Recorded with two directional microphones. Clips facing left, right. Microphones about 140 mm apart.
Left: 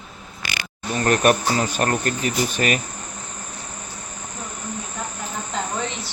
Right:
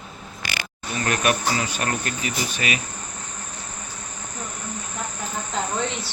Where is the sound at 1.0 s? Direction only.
40° left (ahead or behind).